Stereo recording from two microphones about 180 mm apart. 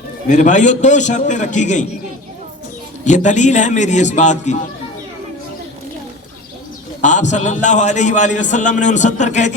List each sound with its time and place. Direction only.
0.3 s a man's voice: 45° left (ahead or behind)
3.0 s a man's voice: 40° left (ahead or behind)
7.0 s a man's voice: 40° left (ahead or behind)